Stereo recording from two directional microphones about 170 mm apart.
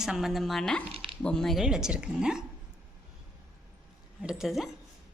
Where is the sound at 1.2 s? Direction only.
5° left (ahead or behind).